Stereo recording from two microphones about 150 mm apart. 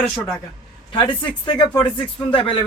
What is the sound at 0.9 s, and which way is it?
Speech, 30° left (ahead or behind).